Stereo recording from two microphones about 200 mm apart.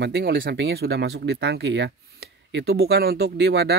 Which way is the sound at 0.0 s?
55° right (ahead or behind).